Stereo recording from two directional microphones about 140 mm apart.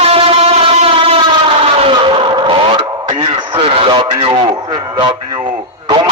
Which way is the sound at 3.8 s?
35° right (ahead or behind).